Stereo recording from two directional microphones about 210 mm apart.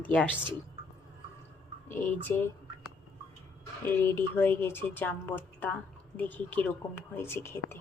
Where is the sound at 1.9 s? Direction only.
10° left (ahead or behind).